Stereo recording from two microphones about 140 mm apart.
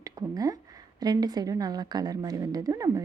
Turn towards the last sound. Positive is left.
turn(degrees=-25)  # may be behind; listen again after turning